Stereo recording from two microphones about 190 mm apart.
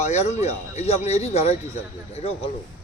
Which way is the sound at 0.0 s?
35° left (ahead or behind).